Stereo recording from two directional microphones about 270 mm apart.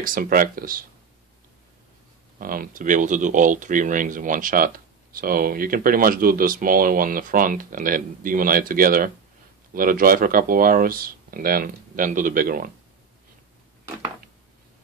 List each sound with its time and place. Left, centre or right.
0.0 s speech: right
2.3 s speech: right